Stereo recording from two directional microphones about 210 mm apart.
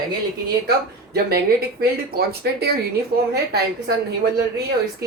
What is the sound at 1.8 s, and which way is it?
Speech, 45° right (ahead or behind).